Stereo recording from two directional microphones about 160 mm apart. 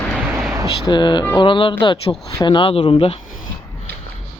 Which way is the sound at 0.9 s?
30° left (ahead or behind).